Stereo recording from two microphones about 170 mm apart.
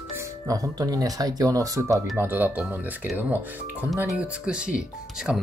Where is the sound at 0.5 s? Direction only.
20° right (ahead or behind).